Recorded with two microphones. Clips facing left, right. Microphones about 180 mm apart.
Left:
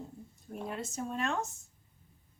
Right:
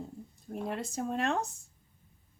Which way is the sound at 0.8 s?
35° right (ahead or behind).